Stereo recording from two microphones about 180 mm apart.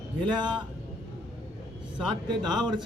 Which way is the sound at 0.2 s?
25° right (ahead or behind).